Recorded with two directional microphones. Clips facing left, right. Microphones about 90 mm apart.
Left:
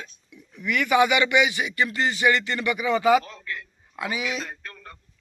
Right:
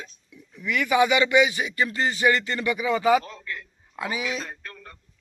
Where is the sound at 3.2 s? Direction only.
Centre (ahead or behind).